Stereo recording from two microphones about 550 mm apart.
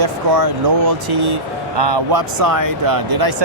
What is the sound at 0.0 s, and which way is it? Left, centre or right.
Speech, right.